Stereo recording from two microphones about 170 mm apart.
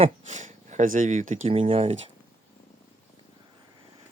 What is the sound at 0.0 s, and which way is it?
Speech, 45° right (ahead or behind).